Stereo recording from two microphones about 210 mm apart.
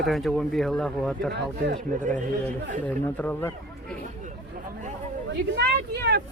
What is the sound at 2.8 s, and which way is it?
Speech, 5° left (ahead or behind).